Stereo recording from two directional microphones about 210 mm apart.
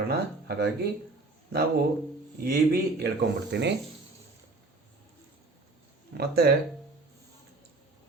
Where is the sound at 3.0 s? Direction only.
55° right (ahead or behind).